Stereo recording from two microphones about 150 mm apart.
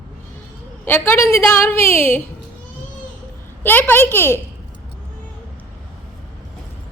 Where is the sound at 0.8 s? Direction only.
15° left (ahead or behind).